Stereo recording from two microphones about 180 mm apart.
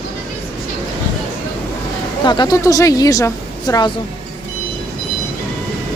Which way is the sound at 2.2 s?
25° left (ahead or behind).